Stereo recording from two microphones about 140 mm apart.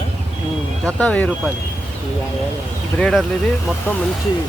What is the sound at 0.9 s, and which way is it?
Speech, 10° left (ahead or behind).